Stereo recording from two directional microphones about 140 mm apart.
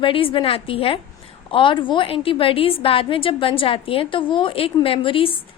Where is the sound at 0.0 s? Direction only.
40° left (ahead or behind).